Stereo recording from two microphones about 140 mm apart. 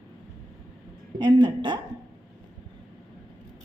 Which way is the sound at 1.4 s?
35° right (ahead or behind).